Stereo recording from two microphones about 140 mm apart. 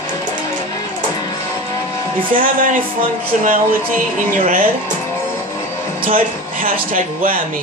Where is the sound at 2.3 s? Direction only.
80° right.